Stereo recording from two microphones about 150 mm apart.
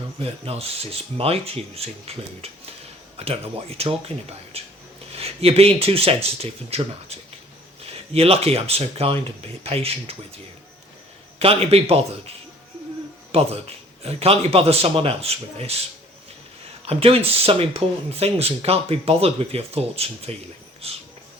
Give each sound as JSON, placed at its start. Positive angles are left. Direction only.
{"t": 0.2, "sound": "speech", "side_deg": -40}
{"t": 13.3, "sound": "speech", "side_deg": -40}
{"t": 16.8, "sound": "speech", "side_deg": -40}